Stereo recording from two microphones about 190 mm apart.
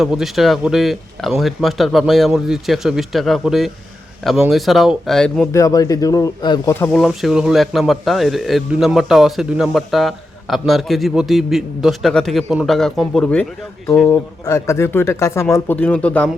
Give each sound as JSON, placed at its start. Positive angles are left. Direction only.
{"t": 0.0, "sound": "speech", "side_deg": 0}
{"t": 5.5, "sound": "speech", "side_deg": 15}
{"t": 6.7, "sound": "speech", "side_deg": 5}